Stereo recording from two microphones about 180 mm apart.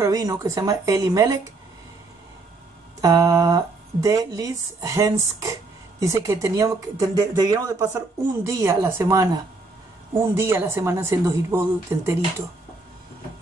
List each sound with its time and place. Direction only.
0.0 s speech: 15° right (ahead or behind)
3.0 s speech: 15° right (ahead or behind)